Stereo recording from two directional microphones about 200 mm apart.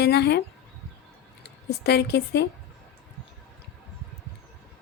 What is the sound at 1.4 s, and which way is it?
A woman's voice, 55° left (ahead or behind).